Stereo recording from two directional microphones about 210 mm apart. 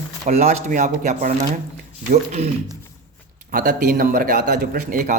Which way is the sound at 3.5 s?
40° right (ahead or behind).